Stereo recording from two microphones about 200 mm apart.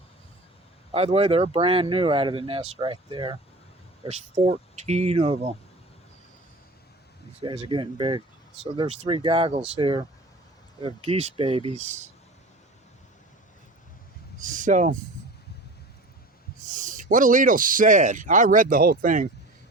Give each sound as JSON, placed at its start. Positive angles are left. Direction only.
{"t": 0.9, "sound": "speech", "side_deg": -30}
{"t": 7.4, "sound": "speech", "side_deg": -25}
{"t": 14.4, "sound": "speech", "side_deg": -40}
{"t": 16.6, "sound": "speech", "side_deg": -40}